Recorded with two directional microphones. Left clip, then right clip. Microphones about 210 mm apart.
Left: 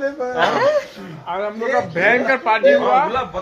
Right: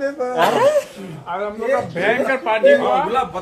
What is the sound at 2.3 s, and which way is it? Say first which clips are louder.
Speech: even; 25° left (ahead or behind).